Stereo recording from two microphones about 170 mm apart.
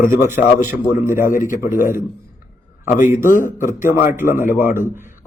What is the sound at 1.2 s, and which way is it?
Speech, 50° left (ahead or behind).